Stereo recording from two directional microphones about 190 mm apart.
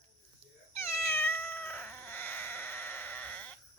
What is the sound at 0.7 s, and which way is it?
Cat, 15° left (ahead or behind).